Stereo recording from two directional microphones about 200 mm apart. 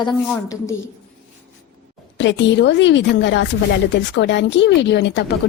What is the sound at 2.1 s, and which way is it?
Speech, 60° left (ahead or behind).